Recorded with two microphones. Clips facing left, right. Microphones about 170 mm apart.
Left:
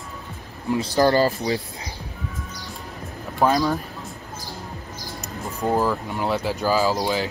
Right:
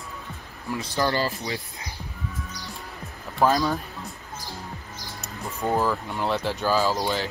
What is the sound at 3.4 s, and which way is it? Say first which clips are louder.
Speech: left 2 dB; centre (ahead or behind).